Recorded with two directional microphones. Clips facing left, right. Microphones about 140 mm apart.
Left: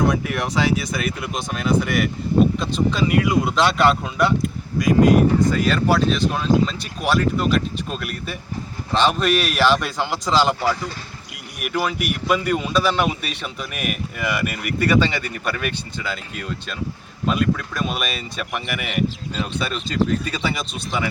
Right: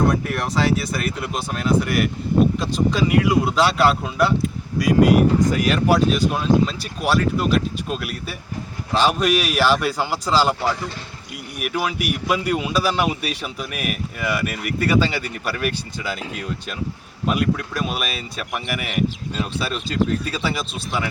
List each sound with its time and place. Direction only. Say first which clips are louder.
0.1 s speech: even; centre (ahead or behind)
5.5 s a man's voice: right 1 dB; 15° right (ahead or behind)
17.2 s speech: even; 5° right (ahead or behind)